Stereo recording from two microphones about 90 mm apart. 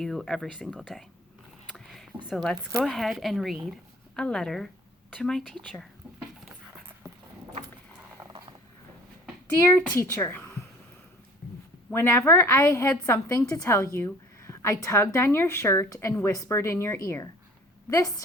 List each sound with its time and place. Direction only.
0.0 s speech: 5° left (ahead or behind)
1.7 s a sound: centre (ahead or behind)
2.3 s speech: 5° left (ahead or behind)
9.6 s a woman's voice: 20° left (ahead or behind)
9.9 s a woman's voice: 35° left (ahead or behind)
10.2 s speech: 25° left (ahead or behind)
11.9 s a woman's voice: 25° left (ahead or behind)